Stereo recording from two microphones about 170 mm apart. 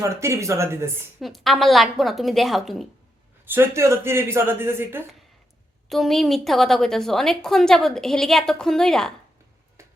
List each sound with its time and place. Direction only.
0.0 s speech: 15° right (ahead or behind)
1.2 s a woman's voice: centre (ahead or behind)
3.4 s speech: 15° right (ahead or behind)
5.9 s a woman's voice: centre (ahead or behind)